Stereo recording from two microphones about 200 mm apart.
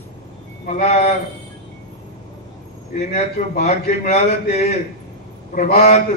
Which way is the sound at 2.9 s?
35° left (ahead or behind).